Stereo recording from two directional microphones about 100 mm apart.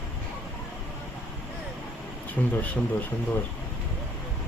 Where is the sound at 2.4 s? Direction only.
15° left (ahead or behind).